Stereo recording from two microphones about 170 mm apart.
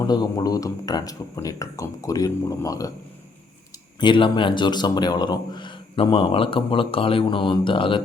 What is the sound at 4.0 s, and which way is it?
A man's voice, 30° left (ahead or behind).